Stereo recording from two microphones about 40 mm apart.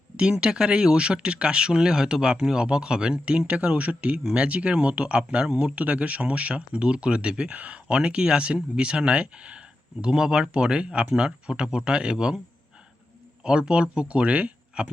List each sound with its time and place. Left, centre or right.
0.2 s speech: right
3.4 s speech: right
5.8 s speech: right; by 12.4 s centre
13.4 s speech: right